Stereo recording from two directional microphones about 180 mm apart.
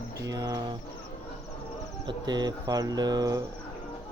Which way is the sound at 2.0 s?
25° right (ahead or behind).